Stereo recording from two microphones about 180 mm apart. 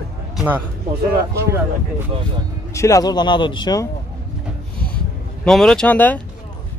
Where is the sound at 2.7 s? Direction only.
15° left (ahead or behind).